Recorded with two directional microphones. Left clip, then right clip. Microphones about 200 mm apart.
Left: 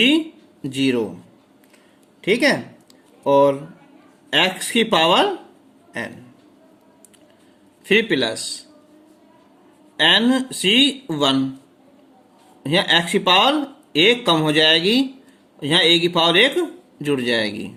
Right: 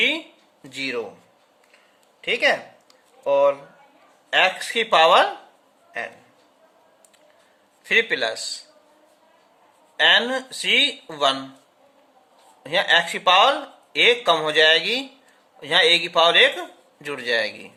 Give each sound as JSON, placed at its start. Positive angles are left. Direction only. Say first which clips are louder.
{"t": 0.6, "sound": "speech", "louder": "left 6 dB", "side_deg": 20}
{"t": 2.2, "sound": "speech", "louder": "left 2 dB", "side_deg": 25}
{"t": 7.9, "sound": "speech", "louder": "left 2 dB", "side_deg": 20}
{"t": 10.0, "sound": "speech", "louder": "left 1 dB", "side_deg": 20}
{"t": 12.6, "sound": "speech", "louder": "left 1 dB", "side_deg": 20}